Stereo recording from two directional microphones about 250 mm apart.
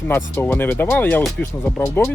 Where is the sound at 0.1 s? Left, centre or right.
Centre.